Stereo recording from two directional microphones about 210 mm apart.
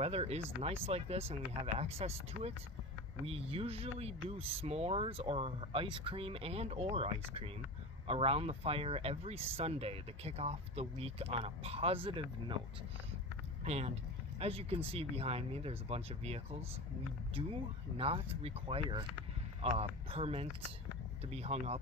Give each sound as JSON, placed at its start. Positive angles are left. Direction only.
{"t": 0.0, "sound": "speech", "side_deg": -30}
{"t": 13.7, "sound": "speech", "side_deg": -30}
{"t": 17.4, "sound": "speech", "side_deg": -25}